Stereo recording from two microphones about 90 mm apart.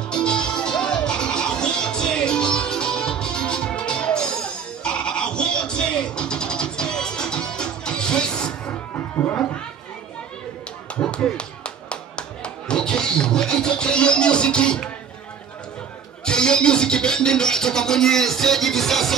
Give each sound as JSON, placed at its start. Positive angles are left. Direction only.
{"t": 0.1, "sound": "music", "side_deg": 10}
{"t": 8.9, "sound": "music", "side_deg": 20}
{"t": 11.0, "sound": "music", "side_deg": 10}
{"t": 16.3, "sound": "music", "side_deg": 10}